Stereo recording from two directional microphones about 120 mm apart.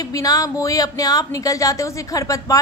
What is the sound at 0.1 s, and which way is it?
Speech, 30° left (ahead or behind).